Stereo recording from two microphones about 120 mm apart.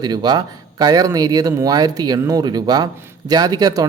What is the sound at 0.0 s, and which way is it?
A man's voice, 35° right (ahead or behind).